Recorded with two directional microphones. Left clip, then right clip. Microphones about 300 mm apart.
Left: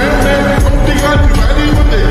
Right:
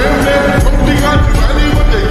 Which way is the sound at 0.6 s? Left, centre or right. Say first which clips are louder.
Even; centre.